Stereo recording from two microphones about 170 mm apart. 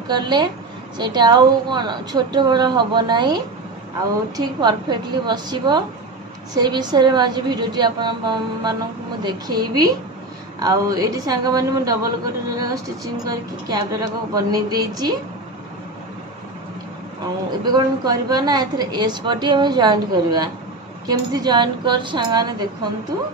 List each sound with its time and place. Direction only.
0.1 s a woman's voice: 25° right (ahead or behind)
17.6 s a woman's voice: 25° right (ahead or behind)